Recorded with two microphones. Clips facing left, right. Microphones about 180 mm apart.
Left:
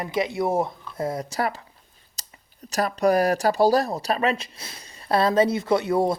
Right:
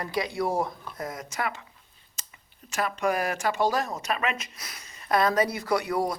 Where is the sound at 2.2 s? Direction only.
35° left (ahead or behind).